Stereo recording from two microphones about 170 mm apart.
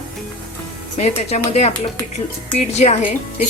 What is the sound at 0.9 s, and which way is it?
Speech, 40° left (ahead or behind).